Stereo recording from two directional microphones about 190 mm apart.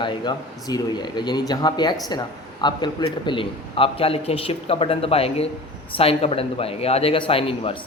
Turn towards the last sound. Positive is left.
turn(degrees=30)  # may be behind; listen again after turning